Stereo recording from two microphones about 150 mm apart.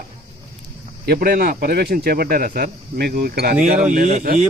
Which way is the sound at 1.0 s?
90° right.